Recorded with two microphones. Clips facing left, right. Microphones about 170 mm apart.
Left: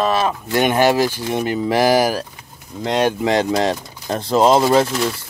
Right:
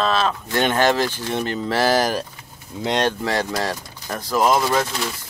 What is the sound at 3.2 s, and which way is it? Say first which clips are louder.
Speech: left 6 dB; 20° left (ahead or behind).